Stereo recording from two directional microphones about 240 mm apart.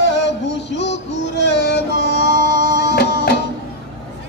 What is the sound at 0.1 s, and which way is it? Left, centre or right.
Music, left.